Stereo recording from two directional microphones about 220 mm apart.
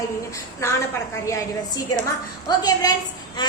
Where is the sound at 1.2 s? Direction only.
15° left (ahead or behind).